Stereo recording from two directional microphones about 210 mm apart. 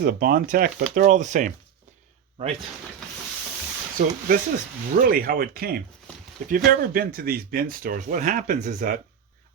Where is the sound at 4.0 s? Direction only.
40° right (ahead or behind).